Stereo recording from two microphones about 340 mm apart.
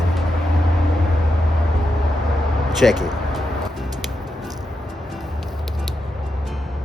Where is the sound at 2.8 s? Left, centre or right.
Centre.